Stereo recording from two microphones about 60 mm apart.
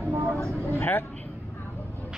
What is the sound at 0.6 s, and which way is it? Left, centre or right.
Speech, left.